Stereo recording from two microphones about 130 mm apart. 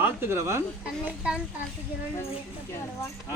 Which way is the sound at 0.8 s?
5° right (ahead or behind).